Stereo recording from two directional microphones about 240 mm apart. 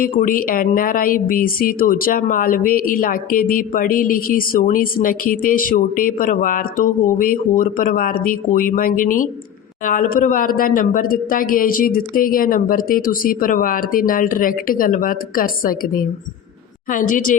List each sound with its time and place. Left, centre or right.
0.0 s a woman's voice: left